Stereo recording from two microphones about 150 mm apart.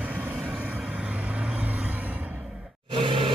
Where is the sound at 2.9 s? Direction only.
35° right (ahead or behind).